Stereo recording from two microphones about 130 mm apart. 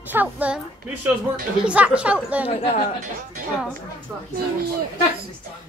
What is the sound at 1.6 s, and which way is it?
Speech, 10° right (ahead or behind).